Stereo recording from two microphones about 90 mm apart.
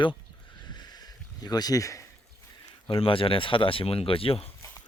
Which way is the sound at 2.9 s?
80° left.